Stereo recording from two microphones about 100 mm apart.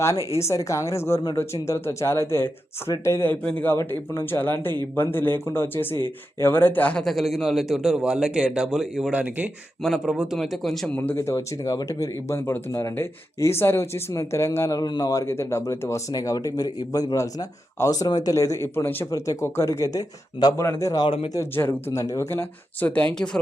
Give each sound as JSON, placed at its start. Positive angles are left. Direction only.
{"t": 0.3, "sound": "speech", "side_deg": 30}
{"t": 7.0, "sound": "a man's voice", "side_deg": 0}
{"t": 9.8, "sound": "a man's voice", "side_deg": 0}
{"t": 10.9, "sound": "speech", "side_deg": 20}
{"t": 22.9, "sound": "speech", "side_deg": 15}